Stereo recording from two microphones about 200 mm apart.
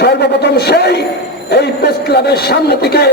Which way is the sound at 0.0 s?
55° left (ahead or behind).